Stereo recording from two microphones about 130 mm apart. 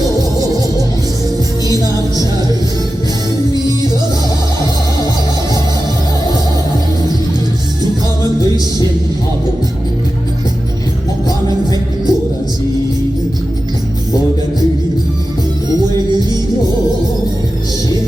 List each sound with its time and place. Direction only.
0.2 s music: 30° right (ahead or behind)
11.3 s music: 30° left (ahead or behind)